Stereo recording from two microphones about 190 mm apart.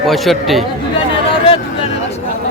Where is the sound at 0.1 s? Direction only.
Centre (ahead or behind).